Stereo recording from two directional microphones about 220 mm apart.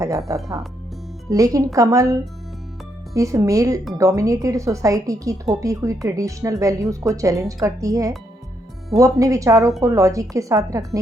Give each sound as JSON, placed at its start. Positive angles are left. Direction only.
{"t": 0.3, "sound": "speech", "side_deg": -15}
{"t": 3.2, "sound": "speech", "side_deg": -15}